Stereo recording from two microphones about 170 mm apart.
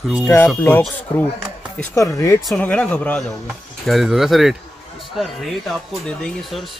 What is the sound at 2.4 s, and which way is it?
Speech, 5° left (ahead or behind).